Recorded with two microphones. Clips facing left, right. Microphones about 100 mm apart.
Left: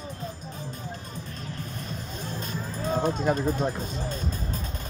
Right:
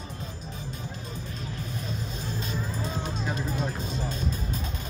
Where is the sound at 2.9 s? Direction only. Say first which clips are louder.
Left 8 dB; 50° left (ahead or behind).